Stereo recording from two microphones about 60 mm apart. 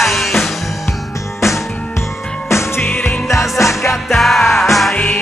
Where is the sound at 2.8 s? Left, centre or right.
Left.